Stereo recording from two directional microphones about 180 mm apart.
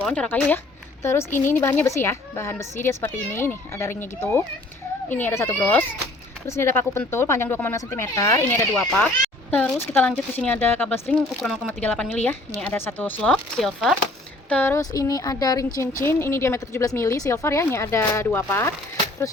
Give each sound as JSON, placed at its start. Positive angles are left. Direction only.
{"t": 0.0, "sound": "a woman's voice", "side_deg": 5}
{"t": 14.5, "sound": "a woman's voice", "side_deg": 10}